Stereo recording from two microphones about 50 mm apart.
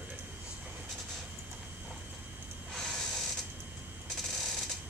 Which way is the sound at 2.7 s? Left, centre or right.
Centre.